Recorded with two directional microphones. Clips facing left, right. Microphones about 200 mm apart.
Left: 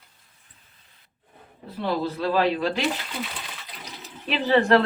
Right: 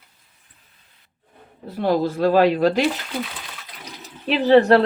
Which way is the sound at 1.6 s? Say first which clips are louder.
Right 6 dB; 45° right (ahead or behind).